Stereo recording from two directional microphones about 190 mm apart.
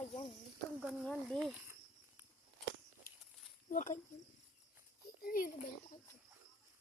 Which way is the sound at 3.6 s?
40° left (ahead or behind).